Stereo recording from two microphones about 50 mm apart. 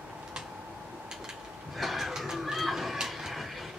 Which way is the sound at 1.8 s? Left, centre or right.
Centre.